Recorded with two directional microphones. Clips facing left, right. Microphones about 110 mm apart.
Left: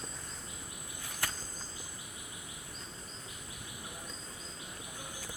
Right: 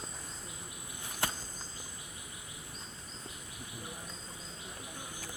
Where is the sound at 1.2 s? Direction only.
25° right (ahead or behind).